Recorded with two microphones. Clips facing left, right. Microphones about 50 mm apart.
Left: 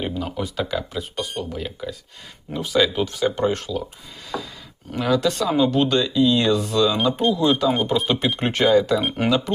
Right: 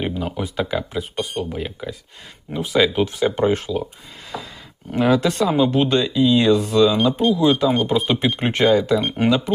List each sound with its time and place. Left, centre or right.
0.0 s speech: centre
4.9 s speech: right
5.1 s speech: centre
7.9 s speech: centre